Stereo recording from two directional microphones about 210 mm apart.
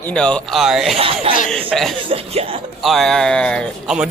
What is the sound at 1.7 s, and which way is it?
Speech, centre (ahead or behind).